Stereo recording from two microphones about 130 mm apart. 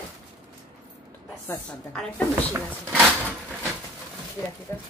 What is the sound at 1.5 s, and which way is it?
Speech, 15° left (ahead or behind).